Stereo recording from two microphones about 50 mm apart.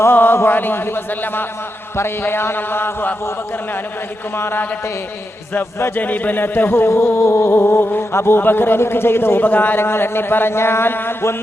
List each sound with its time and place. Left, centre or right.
0.1 s chant: left
0.3 s a man's voice: left
4.4 s speech: left
6.0 s a man's voice: left
9.4 s a man's voice: left